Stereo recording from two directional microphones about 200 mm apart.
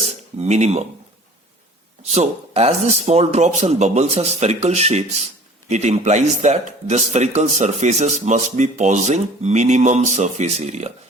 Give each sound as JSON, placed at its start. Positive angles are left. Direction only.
{"t": 0.3, "sound": "a man's voice", "side_deg": -35}
{"t": 2.0, "sound": "a man's voice", "side_deg": -30}